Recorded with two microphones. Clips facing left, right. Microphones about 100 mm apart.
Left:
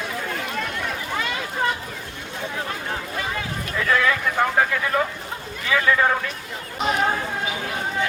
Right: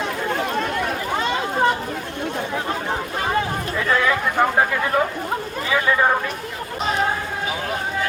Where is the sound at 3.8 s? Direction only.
25° right (ahead or behind).